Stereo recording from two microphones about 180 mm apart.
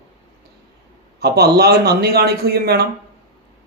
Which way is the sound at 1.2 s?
60° right (ahead or behind).